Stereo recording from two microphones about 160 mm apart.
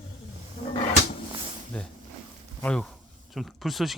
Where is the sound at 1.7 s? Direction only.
5° left (ahead or behind).